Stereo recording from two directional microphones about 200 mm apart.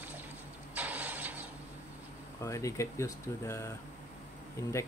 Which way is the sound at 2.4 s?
15° left (ahead or behind).